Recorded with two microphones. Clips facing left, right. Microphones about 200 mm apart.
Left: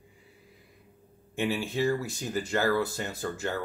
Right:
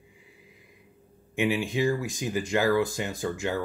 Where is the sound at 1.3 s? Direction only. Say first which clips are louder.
Right 3 dB; 15° right (ahead or behind).